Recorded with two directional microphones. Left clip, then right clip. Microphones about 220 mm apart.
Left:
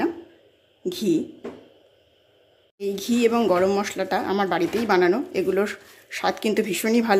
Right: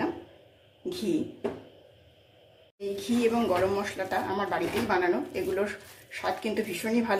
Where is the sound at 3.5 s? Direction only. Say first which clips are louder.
Left 6 dB; 45° left (ahead or behind).